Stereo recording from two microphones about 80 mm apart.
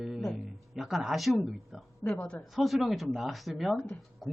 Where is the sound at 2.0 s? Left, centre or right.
Centre.